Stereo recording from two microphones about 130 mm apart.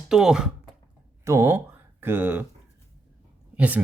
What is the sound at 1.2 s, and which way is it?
Speech, 20° right (ahead or behind).